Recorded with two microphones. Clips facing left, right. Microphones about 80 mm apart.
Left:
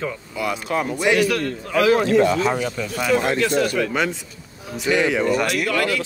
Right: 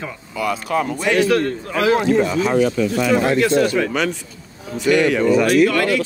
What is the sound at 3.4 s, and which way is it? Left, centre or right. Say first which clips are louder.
Speech: right 4 dB; right.